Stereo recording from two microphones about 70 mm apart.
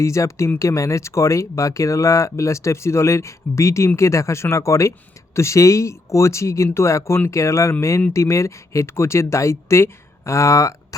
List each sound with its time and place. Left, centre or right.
0.0 s speech: left